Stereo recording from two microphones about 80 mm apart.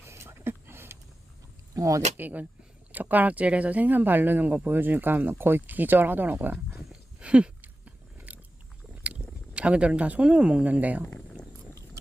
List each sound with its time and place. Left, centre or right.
0.0 s a sound: right
1.7 s speech: right
2.1 s speech: right
7.2 s chewing: centre
9.6 s speech: centre